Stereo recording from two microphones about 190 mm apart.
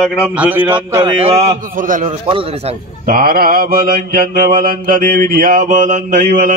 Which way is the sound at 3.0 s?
50° right (ahead or behind).